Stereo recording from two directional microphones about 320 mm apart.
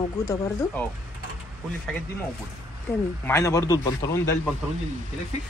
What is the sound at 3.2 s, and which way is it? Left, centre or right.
Speech, centre.